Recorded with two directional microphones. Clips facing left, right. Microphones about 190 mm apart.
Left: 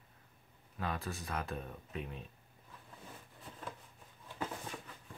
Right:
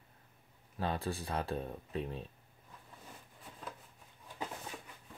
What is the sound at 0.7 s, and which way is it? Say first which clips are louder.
Speech: right 4 dB; 30° right (ahead or behind).